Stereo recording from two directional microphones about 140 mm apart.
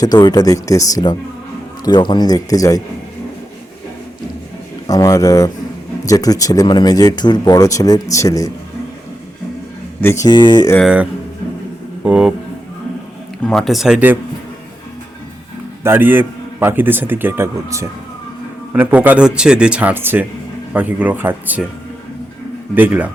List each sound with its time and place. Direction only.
0.0 s speech: 30° left (ahead or behind)
4.9 s speech: 25° left (ahead or behind)
10.0 s speech: 15° left (ahead or behind)
10.2 s speech: 35° left (ahead or behind)
10.8 s a man's voice: 10° right (ahead or behind)
13.4 s speech: 5° left (ahead or behind)
15.8 s a man's voice: 15° right (ahead or behind)
22.7 s a man's voice: 15° right (ahead or behind)